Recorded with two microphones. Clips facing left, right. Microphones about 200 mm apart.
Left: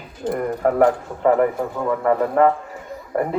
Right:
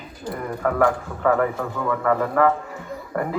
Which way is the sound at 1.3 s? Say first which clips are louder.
Left 3 dB; 20° left (ahead or behind).